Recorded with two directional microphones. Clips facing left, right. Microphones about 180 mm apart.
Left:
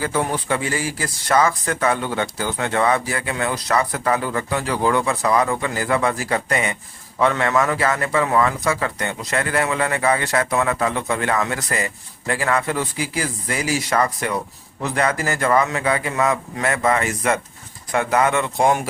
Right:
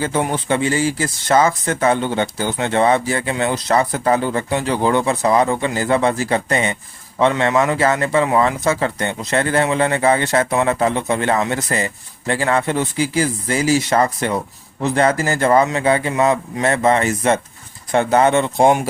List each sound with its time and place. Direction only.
0.0 s a man's voice: 20° right (ahead or behind)